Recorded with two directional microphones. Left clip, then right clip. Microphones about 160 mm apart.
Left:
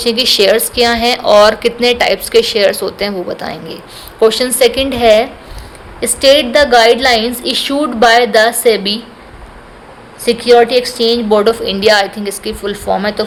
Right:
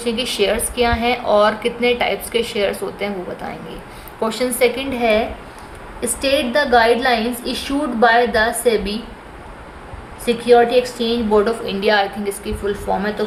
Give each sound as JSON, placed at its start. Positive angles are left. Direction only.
{"t": 0.0, "sound": "a woman's voice", "side_deg": 45}
{"t": 10.2, "sound": "a woman's voice", "side_deg": 60}